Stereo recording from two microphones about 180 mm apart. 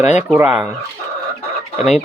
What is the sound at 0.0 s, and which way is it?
Speech, 40° left (ahead or behind).